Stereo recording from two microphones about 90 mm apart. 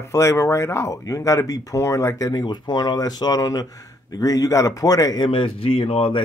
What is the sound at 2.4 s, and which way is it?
Speech, 55° left (ahead or behind).